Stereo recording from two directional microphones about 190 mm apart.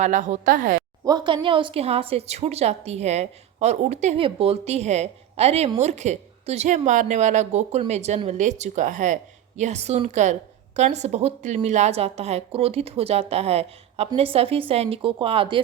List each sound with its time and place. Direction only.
0.0 s a woman's voice: 40° right (ahead or behind)
1.0 s a woman's voice: 25° right (ahead or behind)